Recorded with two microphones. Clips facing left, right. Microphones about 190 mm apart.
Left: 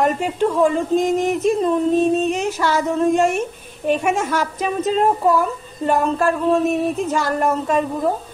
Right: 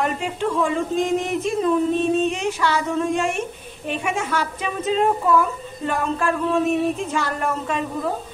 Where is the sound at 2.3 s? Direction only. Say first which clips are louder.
Left 2 dB; 40° left (ahead or behind).